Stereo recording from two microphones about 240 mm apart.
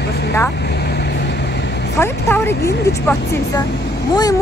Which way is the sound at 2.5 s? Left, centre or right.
Left.